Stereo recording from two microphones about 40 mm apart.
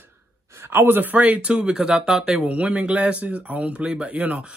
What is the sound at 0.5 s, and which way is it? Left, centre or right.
Speech, right.